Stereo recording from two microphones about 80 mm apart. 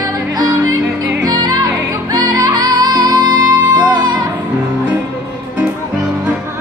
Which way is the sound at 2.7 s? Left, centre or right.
Right.